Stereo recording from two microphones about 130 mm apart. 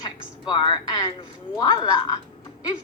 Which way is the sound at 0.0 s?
35° left (ahead or behind).